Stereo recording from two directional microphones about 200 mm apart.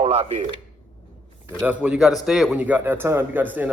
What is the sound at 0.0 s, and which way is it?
Speech, 30° right (ahead or behind).